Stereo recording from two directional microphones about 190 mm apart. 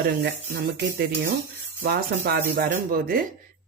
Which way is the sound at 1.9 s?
60° right (ahead or behind).